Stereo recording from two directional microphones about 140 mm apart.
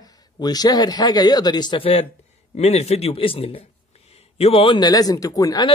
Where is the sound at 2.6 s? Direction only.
50° left (ahead or behind); by 5.6 s 25° left (ahead or behind).